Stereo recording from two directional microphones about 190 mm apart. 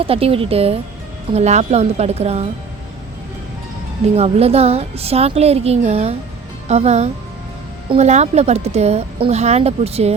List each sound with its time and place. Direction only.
0.0 s a woman's voice: 30° right (ahead or behind)
4.1 s a woman's voice: 30° right (ahead or behind)